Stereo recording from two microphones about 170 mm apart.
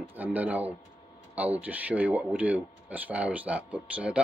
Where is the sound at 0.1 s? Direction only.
10° right (ahead or behind).